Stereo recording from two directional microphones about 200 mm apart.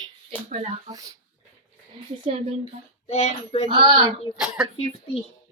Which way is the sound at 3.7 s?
25° right (ahead or behind).